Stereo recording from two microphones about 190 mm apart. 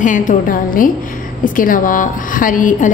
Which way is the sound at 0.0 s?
40° left (ahead or behind).